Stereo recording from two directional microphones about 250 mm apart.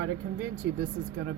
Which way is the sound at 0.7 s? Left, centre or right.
Right.